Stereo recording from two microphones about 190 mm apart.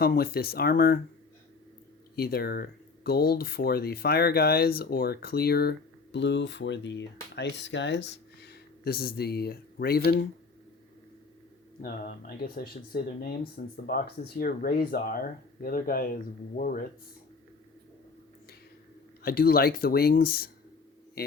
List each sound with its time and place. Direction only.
0.0 s speech: 50° left (ahead or behind)
2.1 s speech: 55° left (ahead or behind); by 8.0 s 70° left (ahead or behind)
8.4 s speech: 55° left (ahead or behind)
11.8 s speech: 50° left (ahead or behind)
19.2 s speech: 50° left (ahead or behind)